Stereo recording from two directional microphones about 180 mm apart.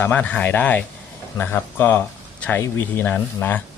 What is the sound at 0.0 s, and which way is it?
Speech, 10° left (ahead or behind).